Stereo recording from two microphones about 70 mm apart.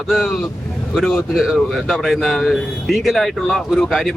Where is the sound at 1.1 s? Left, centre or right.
Centre.